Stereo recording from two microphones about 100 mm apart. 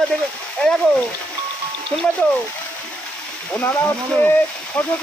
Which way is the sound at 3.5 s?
25° left (ahead or behind).